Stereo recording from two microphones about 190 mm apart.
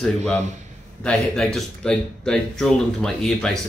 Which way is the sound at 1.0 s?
5° left (ahead or behind).